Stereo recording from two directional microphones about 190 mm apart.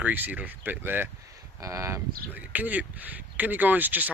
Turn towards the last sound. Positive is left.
turn(degrees=-10)  # may be behind; listen again after turning